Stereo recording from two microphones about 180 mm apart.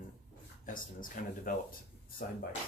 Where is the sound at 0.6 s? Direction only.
50° left (ahead or behind).